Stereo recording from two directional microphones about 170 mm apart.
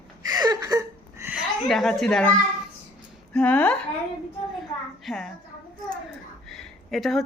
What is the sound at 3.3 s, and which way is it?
Speech, 10° left (ahead or behind).